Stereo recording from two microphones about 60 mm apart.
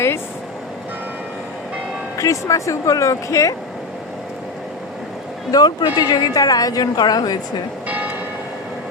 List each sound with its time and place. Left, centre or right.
2.1 s speech: left
5.5 s a woman's voice: left